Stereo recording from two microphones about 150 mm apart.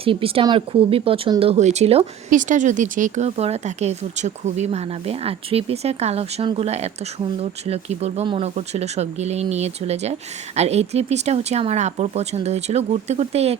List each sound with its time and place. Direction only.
0.0 s speech: 40° right (ahead or behind)
2.3 s speech: 60° right (ahead or behind)